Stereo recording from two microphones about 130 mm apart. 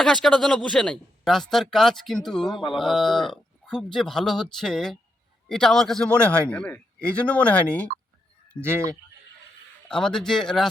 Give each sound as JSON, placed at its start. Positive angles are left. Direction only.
{"t": 0.0, "sound": "speech", "side_deg": 5}
{"t": 2.5, "sound": "music", "side_deg": 35}
{"t": 2.7, "sound": "a man's voice", "side_deg": 0}
{"t": 9.9, "sound": "speech", "side_deg": 5}